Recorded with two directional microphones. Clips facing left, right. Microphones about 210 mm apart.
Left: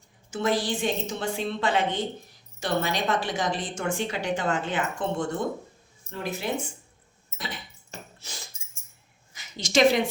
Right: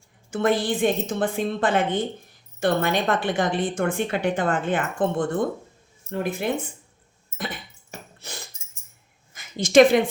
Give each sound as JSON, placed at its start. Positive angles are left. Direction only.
{"t": 0.3, "sound": "a woman's voice", "side_deg": -55}
{"t": 7.3, "sound": "a sound", "side_deg": -55}
{"t": 9.3, "sound": "a woman's voice", "side_deg": -55}